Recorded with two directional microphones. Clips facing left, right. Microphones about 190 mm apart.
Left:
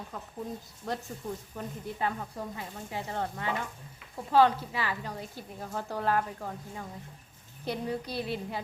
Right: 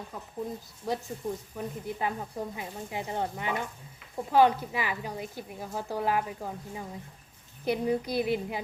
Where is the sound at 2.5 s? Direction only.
15° right (ahead or behind).